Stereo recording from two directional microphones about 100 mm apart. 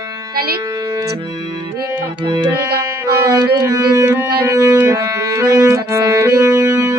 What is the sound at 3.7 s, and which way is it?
Music, 25° right (ahead or behind).